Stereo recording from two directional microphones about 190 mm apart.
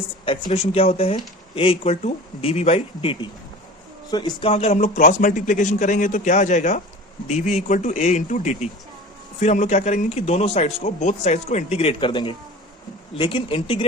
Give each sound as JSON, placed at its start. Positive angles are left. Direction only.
{"t": 0.3, "sound": "a man's voice", "side_deg": 30}